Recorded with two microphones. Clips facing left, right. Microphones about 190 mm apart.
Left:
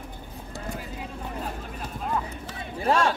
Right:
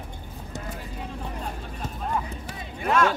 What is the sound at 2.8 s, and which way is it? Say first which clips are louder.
Speech: even; 30° left (ahead or behind).